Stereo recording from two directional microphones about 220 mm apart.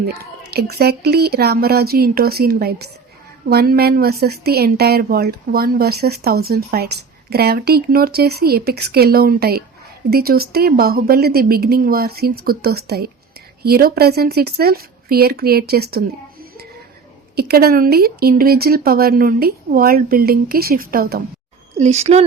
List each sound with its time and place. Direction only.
0.1 s a woman's voice: 45° right (ahead or behind)
21.8 s a woman's voice: 30° right (ahead or behind)